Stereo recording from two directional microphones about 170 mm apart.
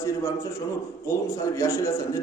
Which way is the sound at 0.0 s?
15° left (ahead or behind).